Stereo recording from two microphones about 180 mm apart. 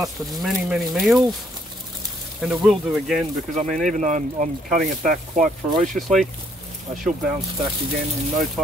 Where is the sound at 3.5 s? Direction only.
45° right (ahead or behind).